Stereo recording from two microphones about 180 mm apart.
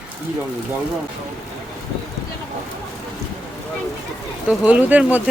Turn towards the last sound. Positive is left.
turn(degrees=-10)  # may be behind; listen again after turning